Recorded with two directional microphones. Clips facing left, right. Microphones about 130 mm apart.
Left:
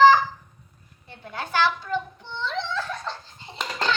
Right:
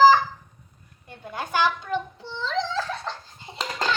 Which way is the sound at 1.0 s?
10° right (ahead or behind).